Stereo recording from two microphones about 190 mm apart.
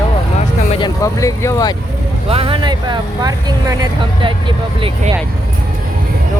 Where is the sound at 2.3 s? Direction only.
30° right (ahead or behind).